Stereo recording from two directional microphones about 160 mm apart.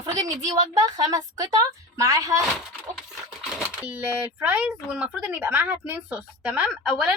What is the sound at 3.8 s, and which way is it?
Speech, 10° right (ahead or behind).